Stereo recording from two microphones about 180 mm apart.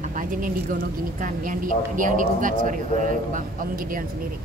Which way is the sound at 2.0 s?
45° right (ahead or behind).